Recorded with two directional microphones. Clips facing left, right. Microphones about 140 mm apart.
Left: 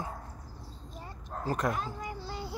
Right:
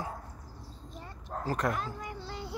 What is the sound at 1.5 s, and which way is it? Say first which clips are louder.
Speech: even; 15° left (ahead or behind).